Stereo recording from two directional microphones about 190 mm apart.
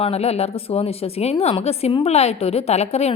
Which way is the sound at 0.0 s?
35° left (ahead or behind).